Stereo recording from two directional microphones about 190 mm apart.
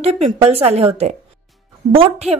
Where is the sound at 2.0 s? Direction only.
35° right (ahead or behind).